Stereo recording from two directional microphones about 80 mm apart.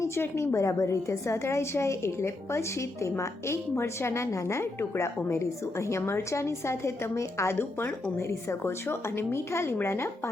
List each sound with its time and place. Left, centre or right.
0.0 s a woman's voice: left